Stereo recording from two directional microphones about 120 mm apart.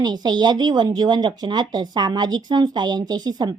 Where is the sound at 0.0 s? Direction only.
35° right (ahead or behind).